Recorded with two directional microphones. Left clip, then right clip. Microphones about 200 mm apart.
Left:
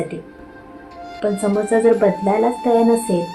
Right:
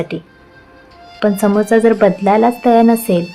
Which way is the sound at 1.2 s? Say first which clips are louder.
Right 5 dB; 60° right (ahead or behind).